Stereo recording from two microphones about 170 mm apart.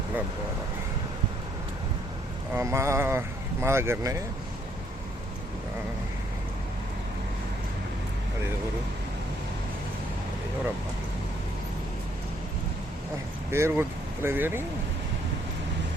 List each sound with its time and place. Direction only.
2.6 s speech: 15° right (ahead or behind)
13.5 s speech: 15° right (ahead or behind)